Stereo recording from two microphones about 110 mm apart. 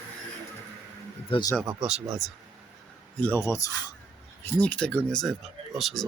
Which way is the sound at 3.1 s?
15° left (ahead or behind).